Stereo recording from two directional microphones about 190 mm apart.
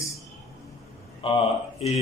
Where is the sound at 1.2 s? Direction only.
30° left (ahead or behind).